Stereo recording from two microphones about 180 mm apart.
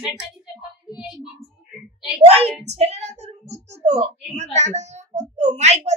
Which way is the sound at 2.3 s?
35° right (ahead or behind).